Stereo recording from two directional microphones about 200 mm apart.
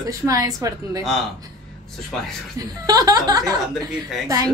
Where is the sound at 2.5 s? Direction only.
20° right (ahead or behind).